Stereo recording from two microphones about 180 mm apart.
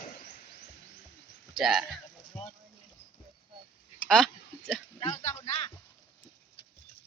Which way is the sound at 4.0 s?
5° left (ahead or behind).